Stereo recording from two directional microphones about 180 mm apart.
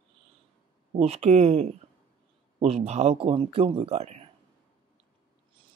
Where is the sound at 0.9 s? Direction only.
35° right (ahead or behind).